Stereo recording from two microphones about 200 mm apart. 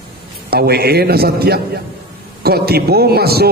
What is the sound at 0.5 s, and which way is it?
A man's voice, 50° right (ahead or behind).